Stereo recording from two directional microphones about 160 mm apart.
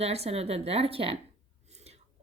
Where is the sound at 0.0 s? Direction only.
40° right (ahead or behind).